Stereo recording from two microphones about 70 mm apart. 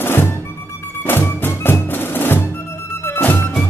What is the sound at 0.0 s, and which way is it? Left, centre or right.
Music, left.